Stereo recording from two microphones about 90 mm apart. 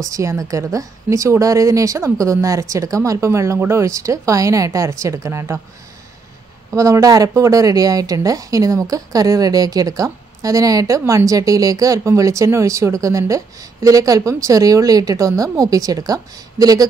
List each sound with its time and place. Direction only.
0.1 s a woman's voice: 35° right (ahead or behind)
6.7 s a woman's voice: 35° right (ahead or behind)